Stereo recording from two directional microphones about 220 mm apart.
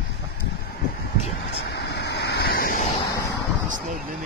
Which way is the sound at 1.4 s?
50° left (ahead or behind).